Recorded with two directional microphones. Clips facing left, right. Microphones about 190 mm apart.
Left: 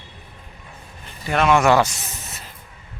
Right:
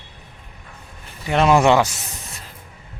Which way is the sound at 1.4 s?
30° right (ahead or behind).